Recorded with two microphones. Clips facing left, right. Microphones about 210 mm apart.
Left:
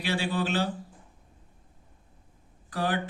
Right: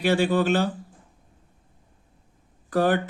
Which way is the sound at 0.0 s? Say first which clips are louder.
Right 8 dB; 50° right (ahead or behind).